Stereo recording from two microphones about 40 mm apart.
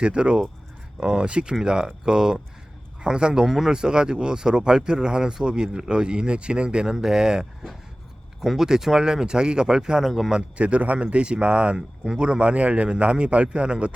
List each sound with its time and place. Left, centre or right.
0.0 s speech: right
3.4 s speech: centre
3.7 s speech: centre
10.0 s speech: centre
10.3 s speech: right